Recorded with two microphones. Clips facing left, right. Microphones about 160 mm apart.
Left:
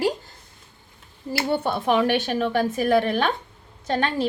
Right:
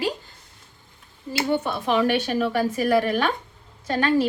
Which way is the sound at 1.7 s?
25° left (ahead or behind).